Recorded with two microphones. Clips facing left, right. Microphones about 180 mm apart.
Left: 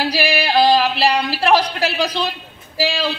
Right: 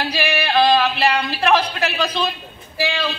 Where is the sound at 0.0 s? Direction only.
35° left (ahead or behind).